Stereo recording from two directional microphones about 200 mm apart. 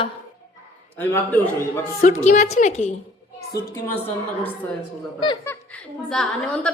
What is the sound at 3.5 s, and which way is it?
Speech, 15° left (ahead or behind).